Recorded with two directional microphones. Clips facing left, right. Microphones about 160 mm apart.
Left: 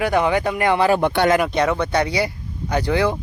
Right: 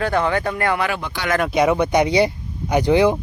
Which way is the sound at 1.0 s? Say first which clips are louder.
Left 11 dB; 60° left (ahead or behind).